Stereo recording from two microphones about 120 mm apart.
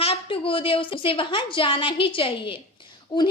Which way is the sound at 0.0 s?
50° left (ahead or behind).